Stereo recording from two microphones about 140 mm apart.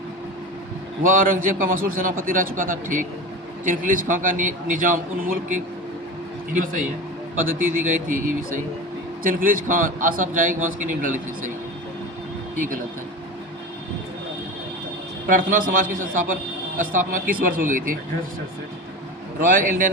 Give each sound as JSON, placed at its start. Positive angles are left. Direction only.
{"t": 1.0, "sound": "a man's voice", "side_deg": -75}
{"t": 8.0, "sound": "a man's voice", "side_deg": -70}
{"t": 9.2, "sound": "a man's voice", "side_deg": -80}
{"t": 12.5, "sound": "a man's voice", "side_deg": -70}
{"t": 15.3, "sound": "a man's voice", "side_deg": -75}
{"t": 19.4, "sound": "a man's voice", "side_deg": -75}